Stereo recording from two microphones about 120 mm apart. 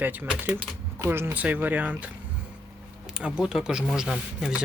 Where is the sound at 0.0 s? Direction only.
15° right (ahead or behind).